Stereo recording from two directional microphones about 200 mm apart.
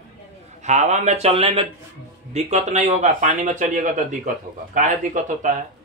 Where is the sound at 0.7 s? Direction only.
35° right (ahead or behind).